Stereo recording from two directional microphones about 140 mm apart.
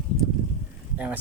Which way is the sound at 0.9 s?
10° right (ahead or behind).